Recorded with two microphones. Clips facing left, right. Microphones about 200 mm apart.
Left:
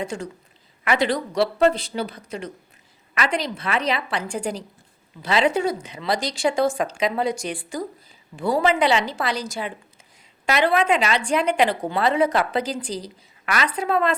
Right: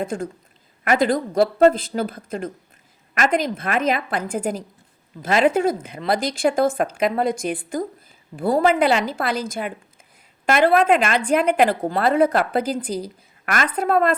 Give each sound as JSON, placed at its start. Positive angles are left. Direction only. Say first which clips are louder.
{"t": 0.0, "sound": "a woman's voice", "louder": "right 3 dB", "side_deg": -55}